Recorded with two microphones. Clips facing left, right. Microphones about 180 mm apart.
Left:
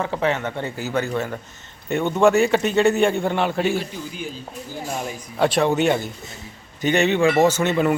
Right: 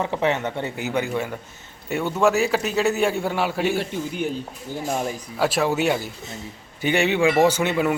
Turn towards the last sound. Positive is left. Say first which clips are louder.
# left 1 dB
turn(degrees=-10)  # may be behind; listen again after turning